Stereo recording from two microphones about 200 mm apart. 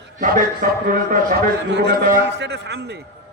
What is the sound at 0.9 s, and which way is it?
Speech, 45° right (ahead or behind).